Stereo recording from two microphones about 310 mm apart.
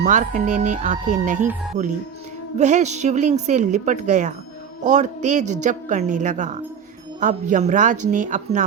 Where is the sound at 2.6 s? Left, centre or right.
Right.